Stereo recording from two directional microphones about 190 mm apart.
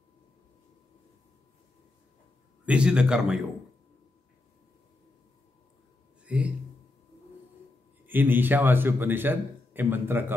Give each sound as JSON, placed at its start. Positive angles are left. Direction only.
{"t": 2.6, "sound": "a man's voice", "side_deg": -5}
{"t": 6.2, "sound": "a sound", "side_deg": -5}
{"t": 8.1, "sound": "a man's voice", "side_deg": -10}